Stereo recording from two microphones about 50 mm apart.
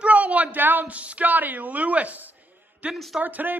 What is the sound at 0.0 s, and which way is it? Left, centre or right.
A woman's voice, right.